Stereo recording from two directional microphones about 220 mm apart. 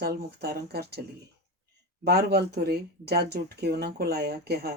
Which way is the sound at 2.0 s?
45° right (ahead or behind).